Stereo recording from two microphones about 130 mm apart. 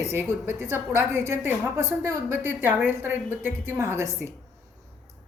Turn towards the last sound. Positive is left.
turn(degrees=-20)  # may be behind; listen again after turning